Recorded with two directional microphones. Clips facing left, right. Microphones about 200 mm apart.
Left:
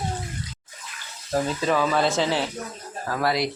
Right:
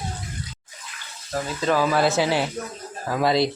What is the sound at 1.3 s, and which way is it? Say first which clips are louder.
Speech: left 4 dB; 25° left (ahead or behind).